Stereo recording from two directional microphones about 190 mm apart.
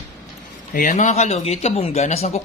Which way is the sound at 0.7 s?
40° left (ahead or behind).